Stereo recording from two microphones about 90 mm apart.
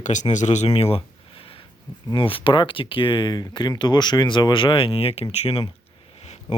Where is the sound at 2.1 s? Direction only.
80° left.